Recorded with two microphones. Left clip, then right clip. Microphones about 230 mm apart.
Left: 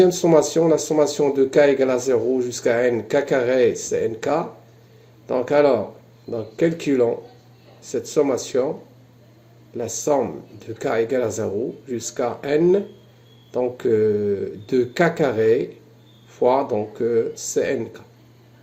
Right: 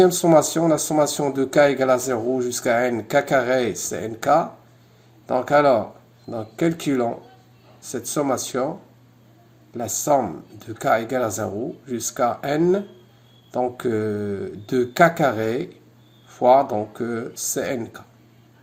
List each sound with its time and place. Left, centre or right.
0.0 s speech: right
9.7 s speech: right